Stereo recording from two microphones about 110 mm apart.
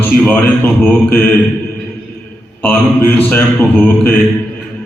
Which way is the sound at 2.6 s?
15° left (ahead or behind).